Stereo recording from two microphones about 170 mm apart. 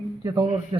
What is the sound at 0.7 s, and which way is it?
Speech, 30° right (ahead or behind).